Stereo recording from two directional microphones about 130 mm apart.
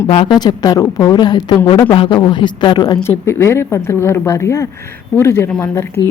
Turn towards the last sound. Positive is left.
turn(degrees=20)  # may be behind; listen again after turning